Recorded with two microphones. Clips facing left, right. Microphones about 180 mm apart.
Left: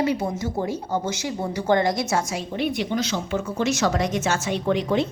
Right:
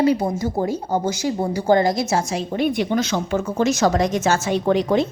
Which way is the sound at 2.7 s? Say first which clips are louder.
Right 4 dB; 50° right (ahead or behind).